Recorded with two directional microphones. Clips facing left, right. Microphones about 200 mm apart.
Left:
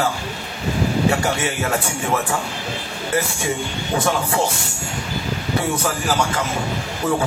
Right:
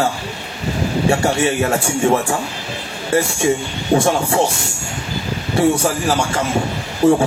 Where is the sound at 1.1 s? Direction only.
30° right (ahead or behind).